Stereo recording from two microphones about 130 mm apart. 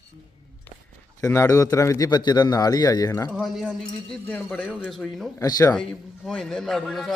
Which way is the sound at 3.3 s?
5° right (ahead or behind).